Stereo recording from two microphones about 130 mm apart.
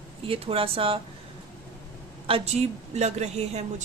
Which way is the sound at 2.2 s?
50° right (ahead or behind).